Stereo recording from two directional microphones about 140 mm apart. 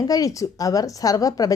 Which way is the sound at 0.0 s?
25° left (ahead or behind).